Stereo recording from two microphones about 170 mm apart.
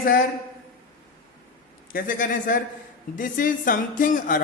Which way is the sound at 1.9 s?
50° left (ahead or behind).